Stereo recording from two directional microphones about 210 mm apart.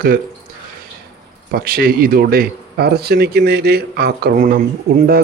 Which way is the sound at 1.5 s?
45° right (ahead or behind).